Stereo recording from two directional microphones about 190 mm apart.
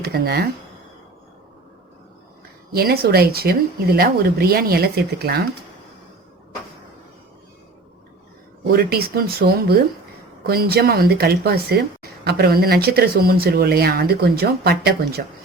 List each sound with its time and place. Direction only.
0.0 s speech: 55° right (ahead or behind)
2.7 s speech: 55° right (ahead or behind)
8.7 s speech: 55° right (ahead or behind)